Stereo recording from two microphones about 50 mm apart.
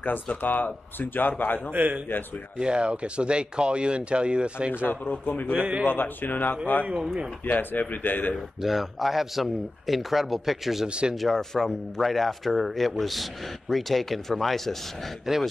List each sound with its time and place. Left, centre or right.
0.0 s speech: left
1.7 s a man's voice: right
2.6 s speech: centre
5.2 s speech: left
5.5 s speech: right
5.9 s speech: left
8.6 s speech: centre
10.9 s speech: right
11.1 s speech: centre